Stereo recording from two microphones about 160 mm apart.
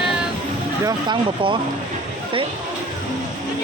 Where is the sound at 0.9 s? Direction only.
30° right (ahead or behind).